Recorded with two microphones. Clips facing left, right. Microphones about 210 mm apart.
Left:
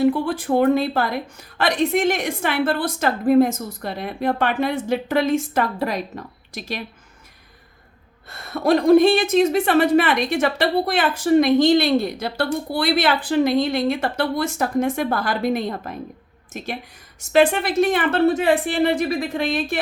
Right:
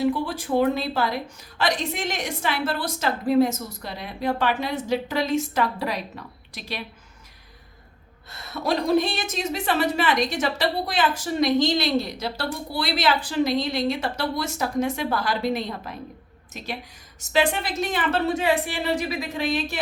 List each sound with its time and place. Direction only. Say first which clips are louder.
0.0 s a woman's voice: left 5 dB; 55° left (ahead or behind)
8.3 s a woman's voice: left 7 dB; 55° left (ahead or behind)